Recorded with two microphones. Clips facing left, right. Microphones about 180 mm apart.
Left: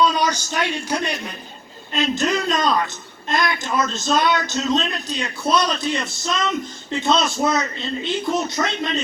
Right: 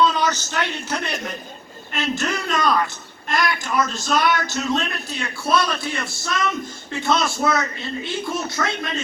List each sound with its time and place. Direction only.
0.0 s a man's voice: 15° left (ahead or behind)